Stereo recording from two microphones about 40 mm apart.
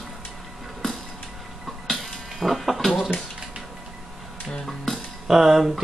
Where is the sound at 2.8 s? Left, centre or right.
Centre.